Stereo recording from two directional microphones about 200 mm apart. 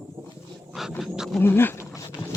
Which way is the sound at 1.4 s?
10° left (ahead or behind).